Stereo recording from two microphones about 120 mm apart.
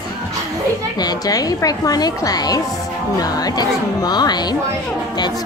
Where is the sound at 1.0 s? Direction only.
35° left (ahead or behind).